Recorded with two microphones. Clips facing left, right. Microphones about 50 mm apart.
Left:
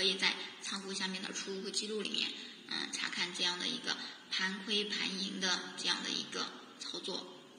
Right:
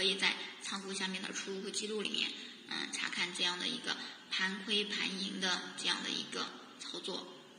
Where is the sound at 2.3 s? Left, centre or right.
Centre.